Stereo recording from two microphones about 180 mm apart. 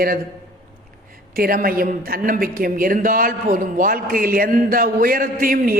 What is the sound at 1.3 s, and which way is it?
A woman's voice, 55° right (ahead or behind).